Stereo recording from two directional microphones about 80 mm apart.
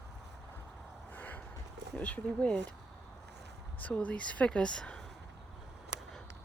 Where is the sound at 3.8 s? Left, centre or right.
Centre.